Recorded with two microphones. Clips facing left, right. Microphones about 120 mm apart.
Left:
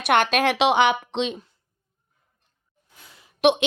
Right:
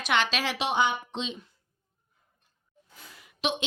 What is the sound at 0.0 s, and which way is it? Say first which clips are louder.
A woman's voice: left 8 dB; 55° left (ahead or behind).